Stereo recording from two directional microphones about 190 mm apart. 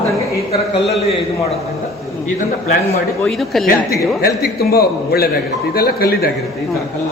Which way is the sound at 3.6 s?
50° left (ahead or behind).